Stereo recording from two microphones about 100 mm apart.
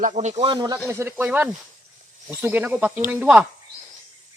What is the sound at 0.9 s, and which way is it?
Speech, 25° right (ahead or behind).